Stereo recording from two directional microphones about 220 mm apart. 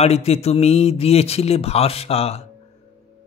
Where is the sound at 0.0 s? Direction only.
30° left (ahead or behind).